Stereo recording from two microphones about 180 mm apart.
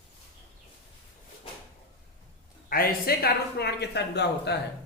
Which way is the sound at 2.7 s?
55° left (ahead or behind).